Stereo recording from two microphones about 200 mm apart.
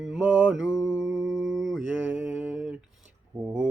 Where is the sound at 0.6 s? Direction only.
15° left (ahead or behind).